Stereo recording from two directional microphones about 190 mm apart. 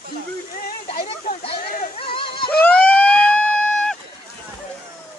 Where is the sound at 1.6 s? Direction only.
45° left (ahead or behind).